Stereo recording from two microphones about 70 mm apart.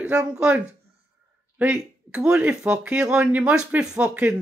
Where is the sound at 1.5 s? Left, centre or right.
Centre.